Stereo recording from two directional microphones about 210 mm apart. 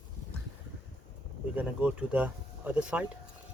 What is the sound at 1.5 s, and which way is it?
Speech, 5° right (ahead or behind).